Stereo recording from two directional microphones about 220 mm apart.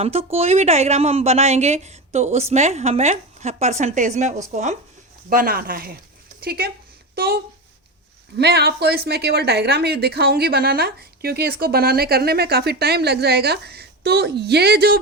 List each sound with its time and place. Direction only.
0.0 s a woman's voice: 30° right (ahead or behind); by 14.9 s 45° right (ahead or behind)